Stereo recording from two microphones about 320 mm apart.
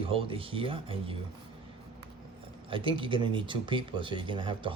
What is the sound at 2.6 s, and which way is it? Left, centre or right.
Speech, centre.